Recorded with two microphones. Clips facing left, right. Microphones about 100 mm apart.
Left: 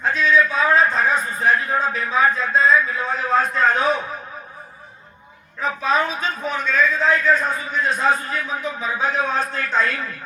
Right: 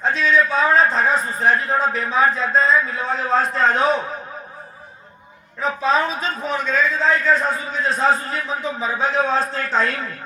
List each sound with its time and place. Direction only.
0.0 s a sound: 35° right (ahead or behind)
2.0 s a man's voice: 35° right (ahead or behind)
5.6 s a man's voice: 30° right (ahead or behind)